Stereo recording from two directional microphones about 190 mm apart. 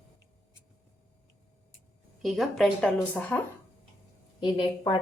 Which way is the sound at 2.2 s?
Centre (ahead or behind).